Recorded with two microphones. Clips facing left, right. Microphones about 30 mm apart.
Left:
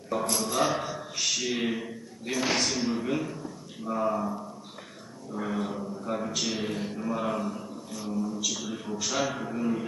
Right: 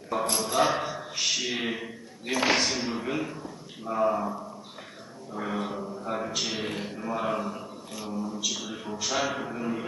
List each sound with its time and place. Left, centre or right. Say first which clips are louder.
0.1 s a man's voice: right 1 dB; centre
7.6 s a sound: left 1 dB; right
8.1 s a man's voice: left 1 dB; centre